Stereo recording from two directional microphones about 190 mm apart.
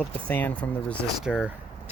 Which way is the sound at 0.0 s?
10° left (ahead or behind).